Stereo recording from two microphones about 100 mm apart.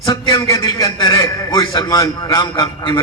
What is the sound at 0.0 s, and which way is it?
A man's voice, 40° left (ahead or behind).